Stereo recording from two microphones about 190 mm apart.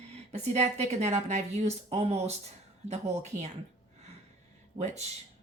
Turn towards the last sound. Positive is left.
turn(degrees=-35)  # may be behind; listen again after turning